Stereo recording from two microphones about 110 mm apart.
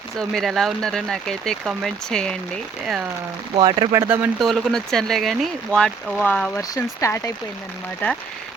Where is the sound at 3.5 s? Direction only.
45° right (ahead or behind).